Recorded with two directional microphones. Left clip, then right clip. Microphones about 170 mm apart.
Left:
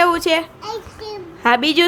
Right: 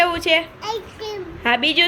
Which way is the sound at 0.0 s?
35° left (ahead or behind).